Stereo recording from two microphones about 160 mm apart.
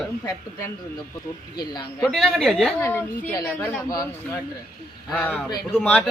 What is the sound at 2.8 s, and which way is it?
Speech, 15° left (ahead or behind).